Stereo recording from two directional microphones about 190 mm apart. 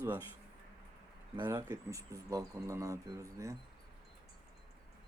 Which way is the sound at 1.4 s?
15° right (ahead or behind).